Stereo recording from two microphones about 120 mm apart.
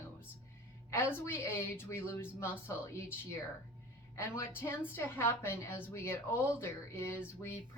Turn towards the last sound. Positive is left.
turn(degrees=20)  # may be behind; listen again after turning